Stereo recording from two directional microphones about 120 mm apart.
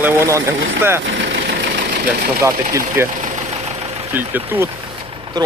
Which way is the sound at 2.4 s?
25° right (ahead or behind).